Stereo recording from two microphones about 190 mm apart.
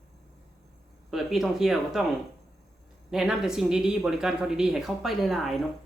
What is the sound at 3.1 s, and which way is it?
Speech, 5° right (ahead or behind).